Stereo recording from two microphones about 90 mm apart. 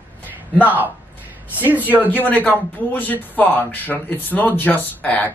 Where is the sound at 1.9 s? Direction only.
20° left (ahead or behind).